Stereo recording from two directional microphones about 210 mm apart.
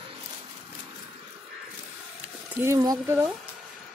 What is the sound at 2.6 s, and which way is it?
Speech, 15° right (ahead or behind).